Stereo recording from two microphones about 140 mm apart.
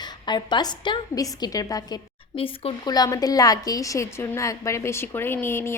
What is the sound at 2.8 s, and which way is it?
A woman's voice, 30° left (ahead or behind).